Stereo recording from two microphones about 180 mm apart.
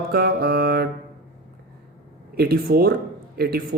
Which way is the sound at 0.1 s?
55° right (ahead or behind).